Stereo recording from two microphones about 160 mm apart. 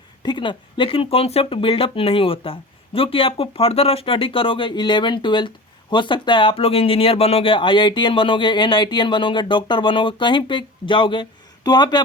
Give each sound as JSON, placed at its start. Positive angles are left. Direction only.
{"t": 0.2, "sound": "speech", "side_deg": 30}